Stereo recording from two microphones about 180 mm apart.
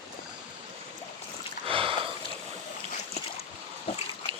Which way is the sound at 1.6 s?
30° right (ahead or behind).